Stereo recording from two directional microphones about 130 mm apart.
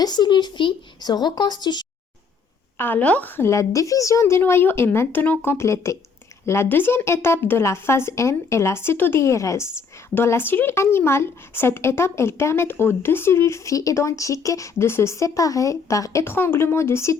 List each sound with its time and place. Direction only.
0.0 s speech: 35° left (ahead or behind)
2.7 s speech: 15° left (ahead or behind)